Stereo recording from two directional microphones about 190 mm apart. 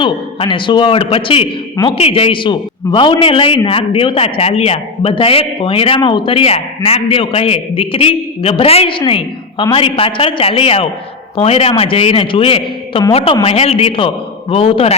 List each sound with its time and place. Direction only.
0.0 s a man's voice: 25° left (ahead or behind)